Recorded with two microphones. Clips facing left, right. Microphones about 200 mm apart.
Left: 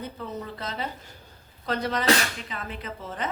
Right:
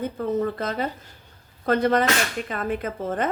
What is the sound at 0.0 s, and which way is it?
A woman's voice, 50° right (ahead or behind).